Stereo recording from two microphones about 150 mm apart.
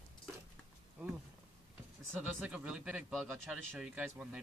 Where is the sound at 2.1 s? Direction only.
10° right (ahead or behind).